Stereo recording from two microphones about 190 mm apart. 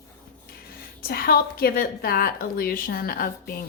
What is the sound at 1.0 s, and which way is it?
A woman's voice, 50° left (ahead or behind).